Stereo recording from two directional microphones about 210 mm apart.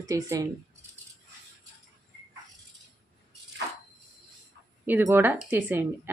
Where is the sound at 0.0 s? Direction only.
15° right (ahead or behind).